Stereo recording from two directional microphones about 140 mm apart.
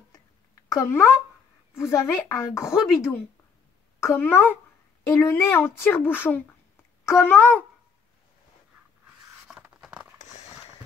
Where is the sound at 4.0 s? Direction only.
20° left (ahead or behind).